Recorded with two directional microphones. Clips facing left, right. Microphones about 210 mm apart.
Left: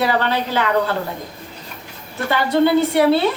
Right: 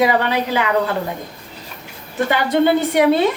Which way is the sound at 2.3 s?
15° right (ahead or behind).